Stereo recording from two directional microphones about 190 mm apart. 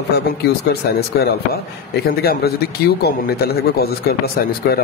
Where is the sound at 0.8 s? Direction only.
55° left (ahead or behind).